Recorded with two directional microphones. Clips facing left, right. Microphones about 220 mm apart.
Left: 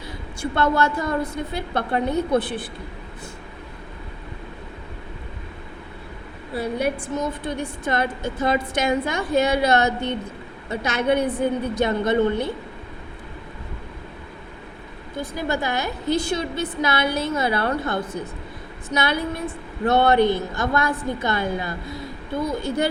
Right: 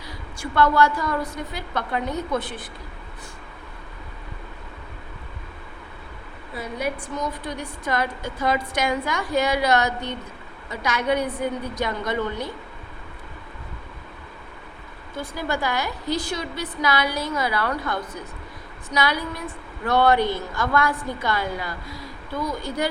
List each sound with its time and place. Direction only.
0.5 s a woman's voice: 25° left (ahead or behind)
6.5 s a woman's voice: 30° left (ahead or behind)
15.1 s a woman's voice: 20° left (ahead or behind)